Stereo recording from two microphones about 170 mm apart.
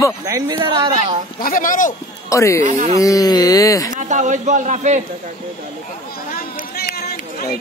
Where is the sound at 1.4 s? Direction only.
55° left (ahead or behind).